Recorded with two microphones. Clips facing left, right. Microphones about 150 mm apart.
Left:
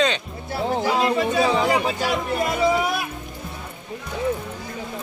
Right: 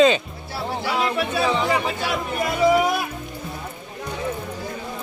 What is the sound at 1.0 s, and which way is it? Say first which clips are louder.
Speech: left 1 dB; 15° left (ahead or behind).